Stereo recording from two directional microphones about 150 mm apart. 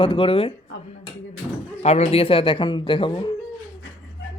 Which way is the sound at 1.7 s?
45° left (ahead or behind).